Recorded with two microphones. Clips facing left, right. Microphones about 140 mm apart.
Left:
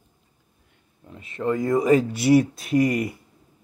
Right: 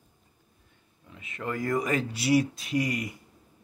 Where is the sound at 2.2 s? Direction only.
50° left (ahead or behind).